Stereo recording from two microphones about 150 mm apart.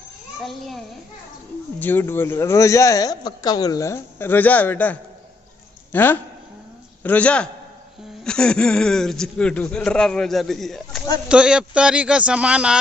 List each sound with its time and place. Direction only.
0.4 s a man's voice: centre (ahead or behind)
1.8 s a man's voice: 15° left (ahead or behind); by 12.7 s 5° right (ahead or behind)